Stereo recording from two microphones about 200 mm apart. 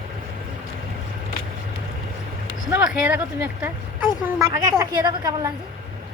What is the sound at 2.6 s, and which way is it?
A woman's voice, 10° right (ahead or behind).